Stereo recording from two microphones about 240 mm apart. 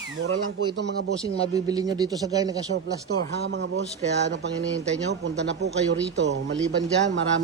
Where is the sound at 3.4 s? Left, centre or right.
Right.